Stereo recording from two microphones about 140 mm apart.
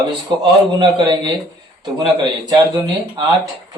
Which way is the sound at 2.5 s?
30° right (ahead or behind).